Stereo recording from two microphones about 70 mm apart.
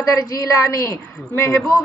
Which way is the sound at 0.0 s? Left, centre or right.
Left.